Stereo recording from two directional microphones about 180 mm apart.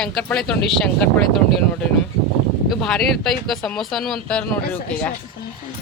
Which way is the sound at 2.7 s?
Centre (ahead or behind).